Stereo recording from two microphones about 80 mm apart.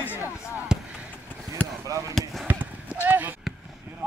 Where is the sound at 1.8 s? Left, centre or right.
Right.